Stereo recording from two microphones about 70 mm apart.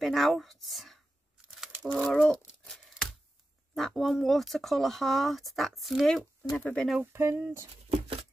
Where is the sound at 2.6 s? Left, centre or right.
Centre.